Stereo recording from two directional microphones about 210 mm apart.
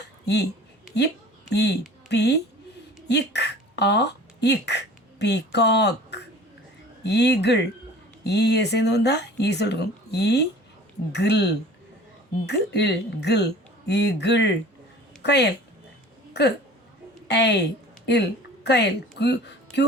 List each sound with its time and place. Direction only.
0.0 s a sound: 55° left (ahead or behind)
0.9 s a woman's voice: 55° left (ahead or behind)
17.2 s a woman's voice: 55° left (ahead or behind)